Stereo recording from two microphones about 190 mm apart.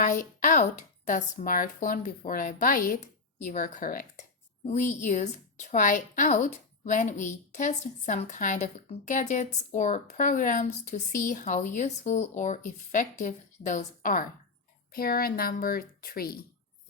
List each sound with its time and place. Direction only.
0.0 s a woman's voice: 45° left (ahead or behind)